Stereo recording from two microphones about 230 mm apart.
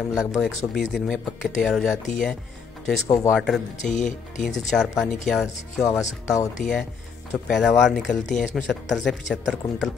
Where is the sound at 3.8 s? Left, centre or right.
Left.